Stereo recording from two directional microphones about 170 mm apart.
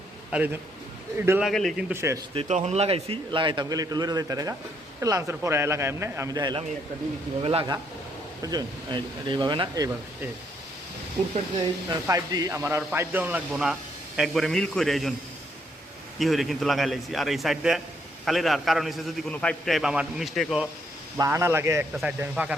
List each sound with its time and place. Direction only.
0.3 s a man's voice: 5° right (ahead or behind)
1.9 s speech: 15° right (ahead or behind)
2.3 s a man's voice: 35° right (ahead or behind)
8.4 s a man's voice: 20° right (ahead or behind)
11.9 s a man's voice: 20° right (ahead or behind); by 15.1 s centre (ahead or behind)
16.1 s a man's voice: centre (ahead or behind)
21.2 s speech: 15° right (ahead or behind)